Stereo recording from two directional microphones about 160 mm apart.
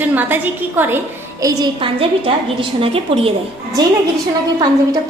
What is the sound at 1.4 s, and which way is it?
Speech, 25° right (ahead or behind).